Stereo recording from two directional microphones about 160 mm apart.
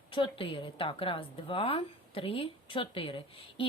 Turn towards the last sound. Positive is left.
turn(degrees=35)  # may be behind; listen again after turning